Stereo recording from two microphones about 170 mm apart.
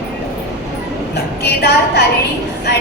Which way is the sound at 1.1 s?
75° left (ahead or behind).